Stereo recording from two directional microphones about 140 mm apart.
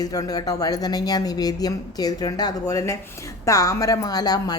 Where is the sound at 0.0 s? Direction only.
25° left (ahead or behind).